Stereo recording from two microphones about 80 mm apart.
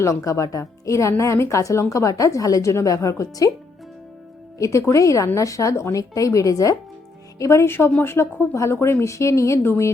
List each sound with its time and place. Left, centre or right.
0.0 s speech: left
4.5 s speech: left